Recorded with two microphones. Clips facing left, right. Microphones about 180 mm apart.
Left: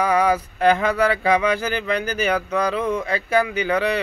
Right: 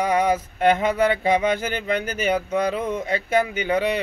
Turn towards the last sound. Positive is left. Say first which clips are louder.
# left 1 dB
turn(degrees=-25)  # may be behind; listen again after turning